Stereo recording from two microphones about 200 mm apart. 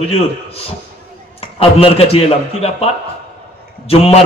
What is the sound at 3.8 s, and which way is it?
Speech, 30° left (ahead or behind).